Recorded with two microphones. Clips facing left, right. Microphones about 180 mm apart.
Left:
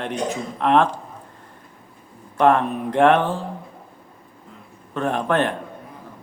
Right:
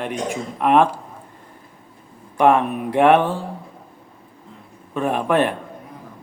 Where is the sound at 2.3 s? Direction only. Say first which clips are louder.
Right 1 dB; 10° right (ahead or behind).